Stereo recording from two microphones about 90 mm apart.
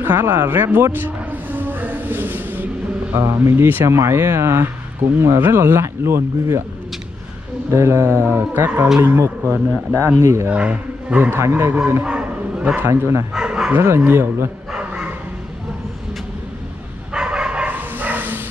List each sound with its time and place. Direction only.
0.0 s a sound: 25° right (ahead or behind)
3.2 s speech: 35° right (ahead or behind)
7.7 s speech: 30° right (ahead or behind)
10.5 s speech: 10° right (ahead or behind); by 11.8 s 30° right (ahead or behind)
12.0 s bow-wow: 10° right (ahead or behind)
12.7 s speech: 30° right (ahead or behind)
13.3 s bow-wow: 5° right (ahead or behind)
13.7 s speech: 25° right (ahead or behind)
14.7 s dog: 10° right (ahead or behind)
17.1 s bow-wow: 10° right (ahead or behind)